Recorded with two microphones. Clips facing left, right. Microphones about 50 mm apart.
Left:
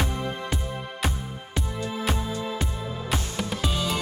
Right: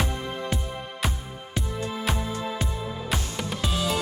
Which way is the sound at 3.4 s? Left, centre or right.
Centre.